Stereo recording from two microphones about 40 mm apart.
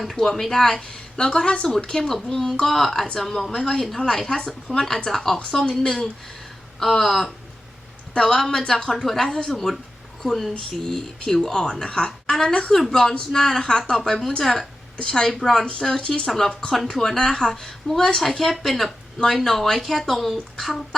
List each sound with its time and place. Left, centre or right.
0.0 s speech: centre
0.8 s a woman's voice: left; by 9.7 s centre
10.8 s a woman's voice: centre
15.3 s speech: centre
15.8 s a woman's voice: centre
16.3 s speech: centre
16.7 s speech: centre